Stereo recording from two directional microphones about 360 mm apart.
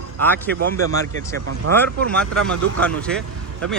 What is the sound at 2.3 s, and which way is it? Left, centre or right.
Speech, centre.